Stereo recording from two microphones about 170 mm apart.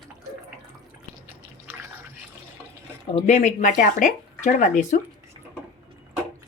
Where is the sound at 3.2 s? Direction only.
40° left (ahead or behind).